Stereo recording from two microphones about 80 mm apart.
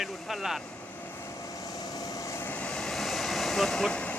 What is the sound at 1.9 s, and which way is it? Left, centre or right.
Vehicle, left.